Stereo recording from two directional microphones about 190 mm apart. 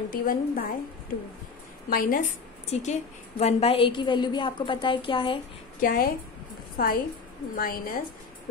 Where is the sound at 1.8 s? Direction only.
50° left (ahead or behind).